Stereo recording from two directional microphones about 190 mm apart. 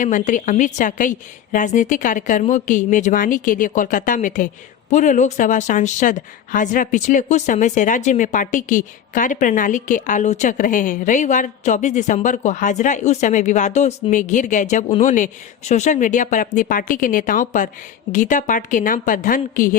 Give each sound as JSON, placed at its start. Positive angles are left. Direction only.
{"t": 0.0, "sound": "a woman's voice", "side_deg": 40}